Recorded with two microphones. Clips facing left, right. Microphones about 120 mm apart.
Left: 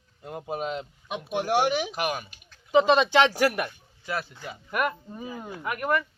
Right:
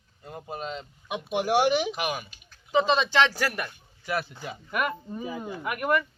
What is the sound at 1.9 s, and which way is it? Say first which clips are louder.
Speech: left 1 dB; centre (ahead or behind).